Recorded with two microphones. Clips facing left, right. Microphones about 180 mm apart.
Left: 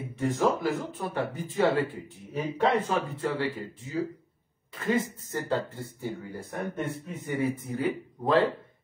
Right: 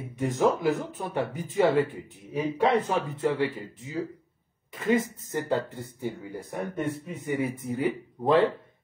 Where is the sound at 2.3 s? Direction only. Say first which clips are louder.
Right 2 dB; 10° right (ahead or behind).